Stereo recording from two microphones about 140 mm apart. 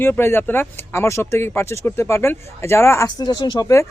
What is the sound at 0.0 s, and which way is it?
Speech, 15° left (ahead or behind).